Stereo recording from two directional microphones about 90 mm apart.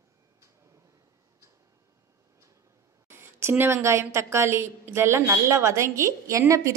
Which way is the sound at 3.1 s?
25° right (ahead or behind).